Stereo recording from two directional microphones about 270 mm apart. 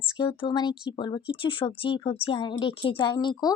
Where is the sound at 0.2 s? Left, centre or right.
Centre.